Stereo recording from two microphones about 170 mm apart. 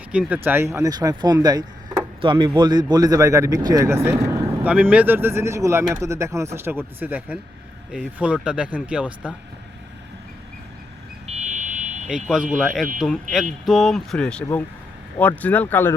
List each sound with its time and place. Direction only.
0.1 s speech: 5° right (ahead or behind)
11.3 s buzzer: 40° right (ahead or behind)
12.0 s speech: 5° right (ahead or behind); by 16.0 s 10° left (ahead or behind)